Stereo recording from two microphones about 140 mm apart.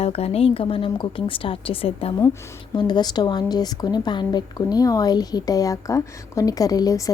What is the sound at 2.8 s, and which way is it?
A woman's voice, 30° left (ahead or behind).